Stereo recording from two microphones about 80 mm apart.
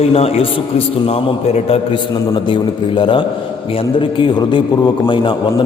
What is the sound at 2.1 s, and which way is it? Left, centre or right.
A man's voice, left.